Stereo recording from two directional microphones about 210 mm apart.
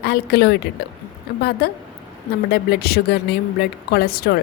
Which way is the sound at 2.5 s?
50° left (ahead or behind).